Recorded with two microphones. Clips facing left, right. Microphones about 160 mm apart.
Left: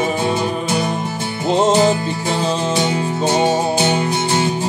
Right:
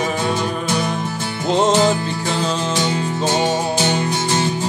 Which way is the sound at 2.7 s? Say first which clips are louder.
Left 2 dB; 25° left (ahead or behind).